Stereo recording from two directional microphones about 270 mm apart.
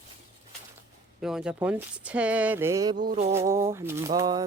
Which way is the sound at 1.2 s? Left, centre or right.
Centre.